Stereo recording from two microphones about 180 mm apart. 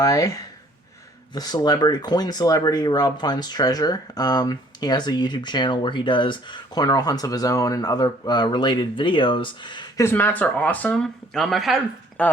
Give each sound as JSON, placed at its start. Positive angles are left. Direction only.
{"t": 0.0, "sound": "speech", "side_deg": 20}
{"t": 10.1, "sound": "speech", "side_deg": 10}